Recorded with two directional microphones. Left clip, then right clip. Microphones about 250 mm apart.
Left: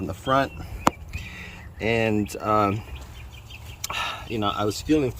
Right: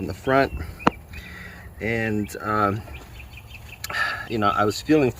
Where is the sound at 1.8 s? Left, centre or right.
Centre.